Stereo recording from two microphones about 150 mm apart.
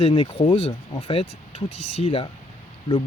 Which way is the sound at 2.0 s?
35° left (ahead or behind).